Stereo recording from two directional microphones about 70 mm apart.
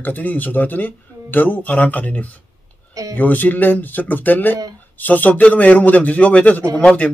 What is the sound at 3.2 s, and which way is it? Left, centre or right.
Speech, left.